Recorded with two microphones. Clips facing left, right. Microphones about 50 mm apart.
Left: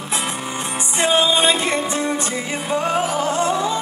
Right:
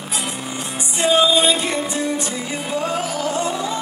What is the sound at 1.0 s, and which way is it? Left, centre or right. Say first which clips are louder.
Music: right 1 dB; left.